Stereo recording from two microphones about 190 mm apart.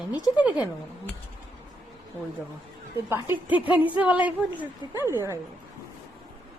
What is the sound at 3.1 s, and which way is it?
A woman's voice, 10° right (ahead or behind).